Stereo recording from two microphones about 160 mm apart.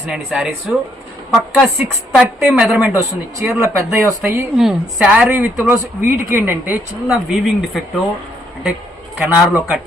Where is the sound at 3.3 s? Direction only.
20° right (ahead or behind).